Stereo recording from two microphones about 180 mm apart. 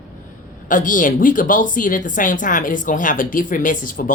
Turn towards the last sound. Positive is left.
turn(degrees=50)  # may be behind; listen again after turning